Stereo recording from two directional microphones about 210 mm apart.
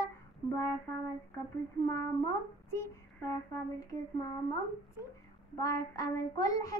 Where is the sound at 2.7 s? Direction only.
10° left (ahead or behind).